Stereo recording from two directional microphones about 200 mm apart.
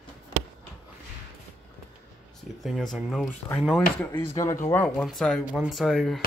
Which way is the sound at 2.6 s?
Centre (ahead or behind).